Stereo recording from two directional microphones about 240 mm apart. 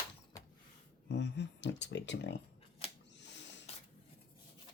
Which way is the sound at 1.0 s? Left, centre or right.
Left.